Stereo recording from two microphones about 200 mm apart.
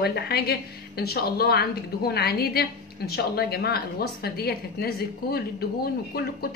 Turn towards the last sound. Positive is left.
turn(degrees=50)  # may be behind; listen again after turning